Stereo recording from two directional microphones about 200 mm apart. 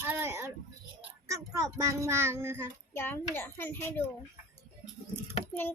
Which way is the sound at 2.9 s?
10° left (ahead or behind).